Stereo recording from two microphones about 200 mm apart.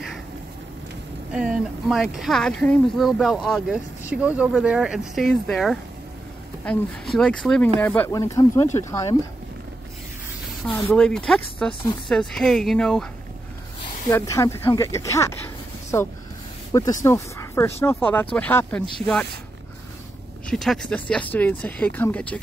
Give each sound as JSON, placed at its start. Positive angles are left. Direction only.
{"t": 1.3, "sound": "speech", "side_deg": -5}
{"t": 10.7, "sound": "speech", "side_deg": 10}
{"t": 14.0, "sound": "speech", "side_deg": 15}
{"t": 20.4, "sound": "speech", "side_deg": 0}